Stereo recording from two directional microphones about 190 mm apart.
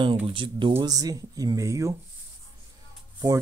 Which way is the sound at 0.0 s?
25° right (ahead or behind).